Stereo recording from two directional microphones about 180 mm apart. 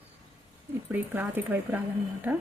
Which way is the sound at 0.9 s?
10° right (ahead or behind).